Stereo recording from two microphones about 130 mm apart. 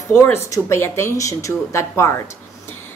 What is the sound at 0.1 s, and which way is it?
A woman's voice, 20° left (ahead or behind).